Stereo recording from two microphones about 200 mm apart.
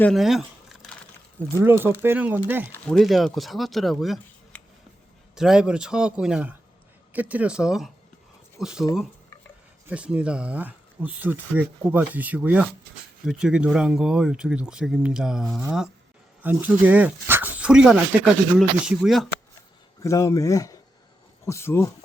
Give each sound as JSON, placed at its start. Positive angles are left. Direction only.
{"t": 0.0, "sound": "a sound", "side_deg": 0}
{"t": 1.5, "sound": "speech", "side_deg": -10}
{"t": 2.7, "sound": "speech", "side_deg": 5}
{"t": 20.0, "sound": "speech", "side_deg": 15}